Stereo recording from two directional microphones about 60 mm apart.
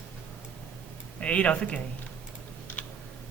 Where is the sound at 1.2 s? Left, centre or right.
Left.